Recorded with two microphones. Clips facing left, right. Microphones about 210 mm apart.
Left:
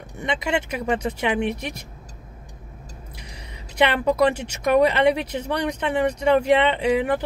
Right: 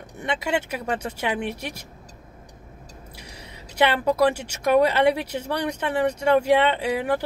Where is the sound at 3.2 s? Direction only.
60° left (ahead or behind).